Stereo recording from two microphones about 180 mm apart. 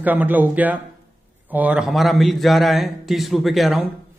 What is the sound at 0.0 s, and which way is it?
A man's voice, 10° right (ahead or behind).